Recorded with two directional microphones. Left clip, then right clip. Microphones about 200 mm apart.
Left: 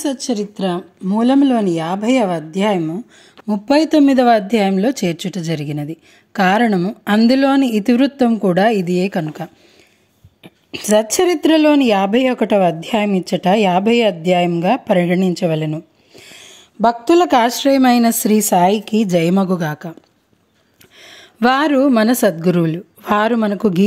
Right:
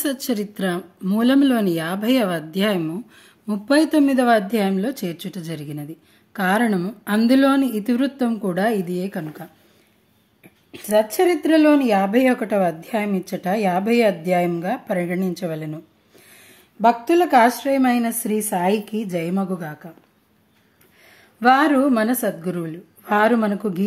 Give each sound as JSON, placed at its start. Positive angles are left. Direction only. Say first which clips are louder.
{"t": 0.0, "sound": "speech", "louder": "left 4 dB", "side_deg": 5}
{"t": 3.4, "sound": "speech", "louder": "left 4 dB", "side_deg": 25}
{"t": 21.0, "sound": "a woman's voice", "louder": "left 2 dB", "side_deg": 50}